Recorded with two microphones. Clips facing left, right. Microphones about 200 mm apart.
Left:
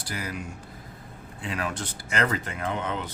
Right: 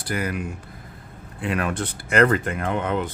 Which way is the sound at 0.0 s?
55° right (ahead or behind).